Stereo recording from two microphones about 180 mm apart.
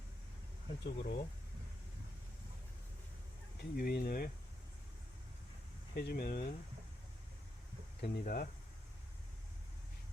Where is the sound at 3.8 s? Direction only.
55° left (ahead or behind).